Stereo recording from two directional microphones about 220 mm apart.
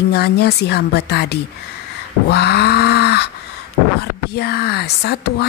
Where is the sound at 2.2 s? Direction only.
45° left (ahead or behind).